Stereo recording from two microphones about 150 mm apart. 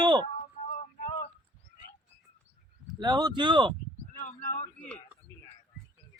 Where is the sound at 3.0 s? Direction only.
25° right (ahead or behind).